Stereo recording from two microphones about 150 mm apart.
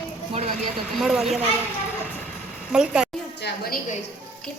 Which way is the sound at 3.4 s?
90° left.